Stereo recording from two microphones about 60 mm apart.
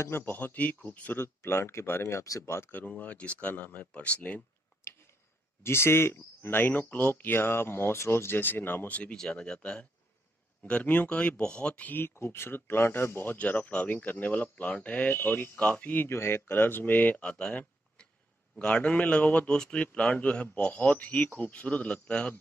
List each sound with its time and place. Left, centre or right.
0.2 s a man's voice: left
1.2 s speech: left
2.7 s a man's voice: left
4.8 s tick-tock: left
5.6 s speech: left
9.1 s a man's voice: centre
11.9 s a man's voice: left
16.1 s speech: left
17.2 s speech: centre
18.0 s a sound: centre
18.6 s a man's voice: centre